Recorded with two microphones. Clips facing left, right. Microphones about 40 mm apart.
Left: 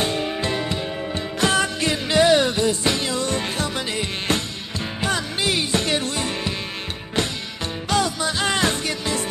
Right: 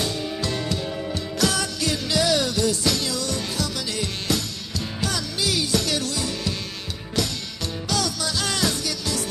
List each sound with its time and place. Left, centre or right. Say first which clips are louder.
0.0 s music: left 4 dB; left